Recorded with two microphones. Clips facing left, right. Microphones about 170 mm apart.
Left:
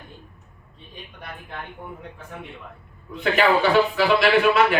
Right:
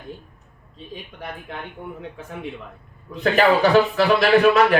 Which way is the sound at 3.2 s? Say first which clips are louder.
Right 3 dB; 40° right (ahead or behind).